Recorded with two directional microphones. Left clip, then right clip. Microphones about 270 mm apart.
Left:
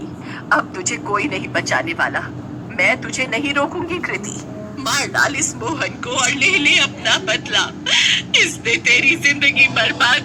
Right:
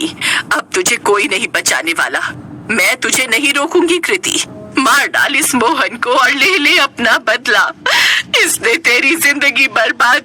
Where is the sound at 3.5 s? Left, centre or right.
Right.